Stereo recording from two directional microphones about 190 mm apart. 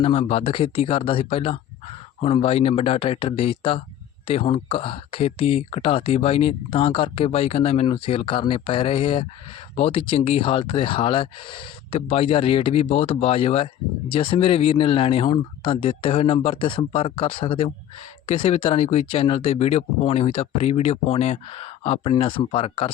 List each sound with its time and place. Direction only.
0.0 s speech: 35° left (ahead or behind)